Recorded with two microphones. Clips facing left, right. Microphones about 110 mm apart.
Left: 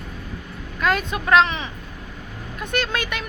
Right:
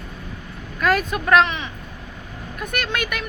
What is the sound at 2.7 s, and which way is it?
Speech, 30° left (ahead or behind).